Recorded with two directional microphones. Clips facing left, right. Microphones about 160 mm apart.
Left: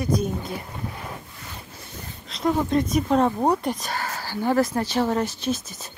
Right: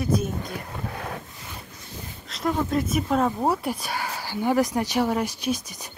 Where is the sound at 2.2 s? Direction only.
Centre (ahead or behind).